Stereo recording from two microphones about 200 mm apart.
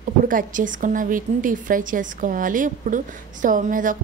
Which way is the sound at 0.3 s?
40° right (ahead or behind).